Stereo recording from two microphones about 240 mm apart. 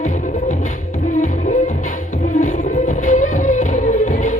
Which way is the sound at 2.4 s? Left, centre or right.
Left.